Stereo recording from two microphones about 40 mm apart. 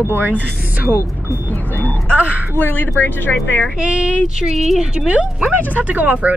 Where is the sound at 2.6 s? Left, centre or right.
Left.